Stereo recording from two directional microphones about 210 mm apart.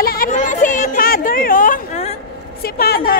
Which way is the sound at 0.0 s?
45° left (ahead or behind).